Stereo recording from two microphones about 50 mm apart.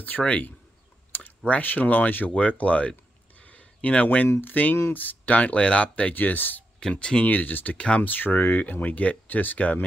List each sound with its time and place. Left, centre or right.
0.2 s speech: left
3.3 s a sound: left
4.3 s speech: left
6.1 s speech: left
6.8 s speech: centre
7.2 s speech: left
7.7 s speech: left
8.0 s speech: left